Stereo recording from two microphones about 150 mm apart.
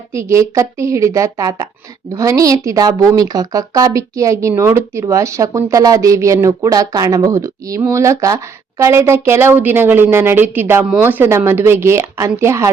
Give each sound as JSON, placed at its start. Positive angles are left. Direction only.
{"t": 0.1, "sound": "a woman's voice", "side_deg": -20}